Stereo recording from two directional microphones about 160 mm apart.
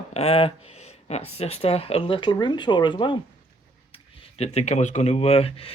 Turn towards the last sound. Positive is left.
turn(degrees=40)  # may be behind; listen again after turning